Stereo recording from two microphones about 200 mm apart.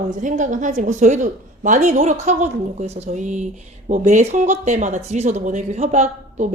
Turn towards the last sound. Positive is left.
turn(degrees=-35)  # may be behind; listen again after turning